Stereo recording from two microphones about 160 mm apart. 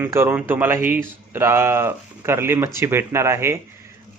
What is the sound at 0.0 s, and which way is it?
Speech, 15° right (ahead or behind).